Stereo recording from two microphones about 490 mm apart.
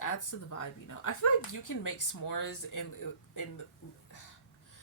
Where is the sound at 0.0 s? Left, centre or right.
Left.